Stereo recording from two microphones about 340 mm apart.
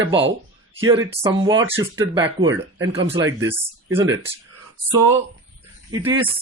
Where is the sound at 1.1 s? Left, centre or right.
Centre.